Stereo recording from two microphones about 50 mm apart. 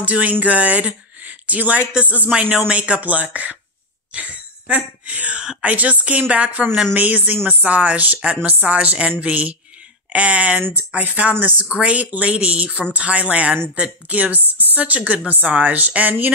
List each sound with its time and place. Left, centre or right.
0.0 s a woman's voice: right
4.1 s a sound: right
5.6 s a woman's voice: right